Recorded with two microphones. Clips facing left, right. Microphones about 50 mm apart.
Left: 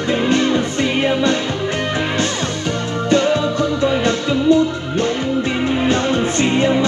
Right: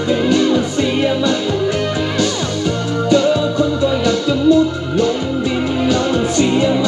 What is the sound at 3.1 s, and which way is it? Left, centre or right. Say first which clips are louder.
Music: right 1 dB; left.